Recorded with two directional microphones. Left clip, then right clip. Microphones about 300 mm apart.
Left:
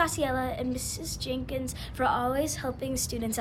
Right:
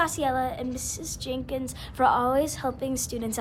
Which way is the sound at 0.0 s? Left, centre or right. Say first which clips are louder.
Right 2 dB; centre.